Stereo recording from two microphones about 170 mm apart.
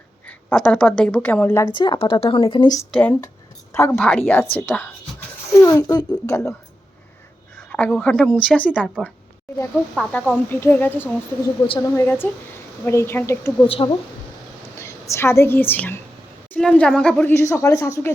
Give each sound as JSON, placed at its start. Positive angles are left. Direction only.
{"t": 0.3, "sound": "speech", "side_deg": 5}
{"t": 1.6, "sound": "speech", "side_deg": 25}
{"t": 2.9, "sound": "speech", "side_deg": 5}
{"t": 7.7, "sound": "speech", "side_deg": 5}
{"t": 13.7, "sound": "a woman's voice", "side_deg": 30}
{"t": 14.8, "sound": "a woman's voice", "side_deg": 15}